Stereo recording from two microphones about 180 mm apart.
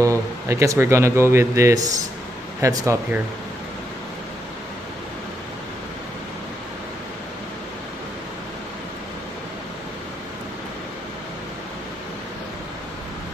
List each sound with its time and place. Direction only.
0.0 s speech: 15° right (ahead or behind)